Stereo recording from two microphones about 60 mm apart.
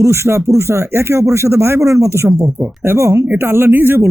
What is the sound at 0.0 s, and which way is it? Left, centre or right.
Speech, right.